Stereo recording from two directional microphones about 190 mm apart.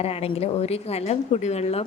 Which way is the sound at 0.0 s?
30° left (ahead or behind).